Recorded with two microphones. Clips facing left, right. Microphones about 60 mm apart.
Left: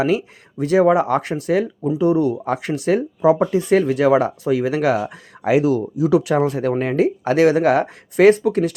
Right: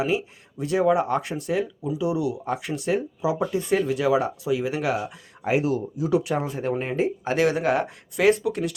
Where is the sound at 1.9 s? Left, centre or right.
Left.